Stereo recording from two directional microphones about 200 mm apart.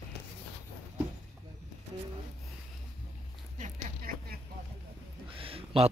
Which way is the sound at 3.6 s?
45° right (ahead or behind).